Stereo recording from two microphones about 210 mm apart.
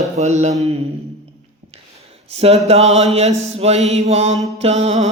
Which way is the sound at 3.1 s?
30° right (ahead or behind).